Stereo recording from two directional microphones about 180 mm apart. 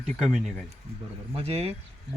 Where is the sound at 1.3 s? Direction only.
35° right (ahead or behind).